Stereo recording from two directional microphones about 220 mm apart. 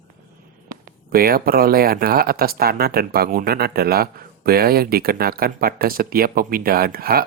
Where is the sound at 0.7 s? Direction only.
40° right (ahead or behind).